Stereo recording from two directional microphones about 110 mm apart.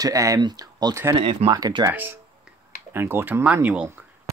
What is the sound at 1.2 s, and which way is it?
Speech, 55° right (ahead or behind).